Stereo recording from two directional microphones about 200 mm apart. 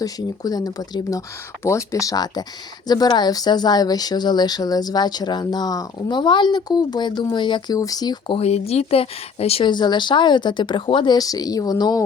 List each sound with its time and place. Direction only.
0.0 s speech: 20° left (ahead or behind)